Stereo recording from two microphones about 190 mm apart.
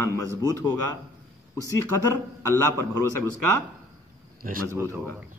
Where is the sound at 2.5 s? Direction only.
15° left (ahead or behind).